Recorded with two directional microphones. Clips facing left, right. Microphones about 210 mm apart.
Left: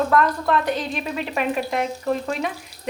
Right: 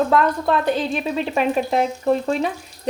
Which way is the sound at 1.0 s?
35° right (ahead or behind).